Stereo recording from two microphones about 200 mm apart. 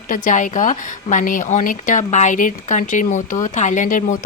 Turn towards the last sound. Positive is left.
turn(degrees=40)  # may be behind; listen again after turning